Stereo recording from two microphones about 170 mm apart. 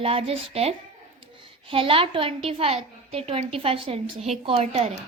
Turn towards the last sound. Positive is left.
turn(degrees=-35)  # may be behind; listen again after turning